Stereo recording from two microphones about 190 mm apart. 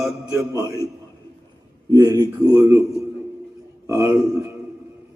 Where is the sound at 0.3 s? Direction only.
20° right (ahead or behind).